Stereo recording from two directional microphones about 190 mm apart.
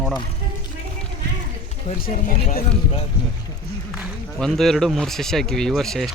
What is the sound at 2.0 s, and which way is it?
Speech, 45° left (ahead or behind).